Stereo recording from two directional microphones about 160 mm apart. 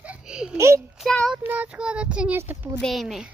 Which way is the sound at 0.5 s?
20° right (ahead or behind).